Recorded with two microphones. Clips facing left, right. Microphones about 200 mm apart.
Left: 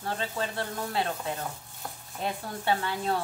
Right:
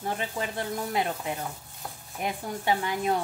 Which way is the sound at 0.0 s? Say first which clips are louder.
Right 1 dB; 15° right (ahead or behind).